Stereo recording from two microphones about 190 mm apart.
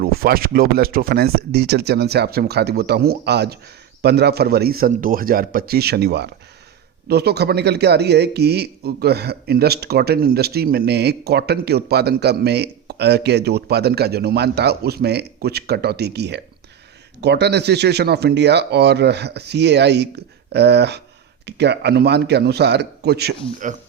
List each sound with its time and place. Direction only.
0.0 s speech: 50° right (ahead or behind)